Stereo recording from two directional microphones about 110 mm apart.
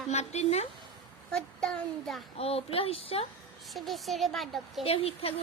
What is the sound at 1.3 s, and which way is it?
Speech, 5° left (ahead or behind).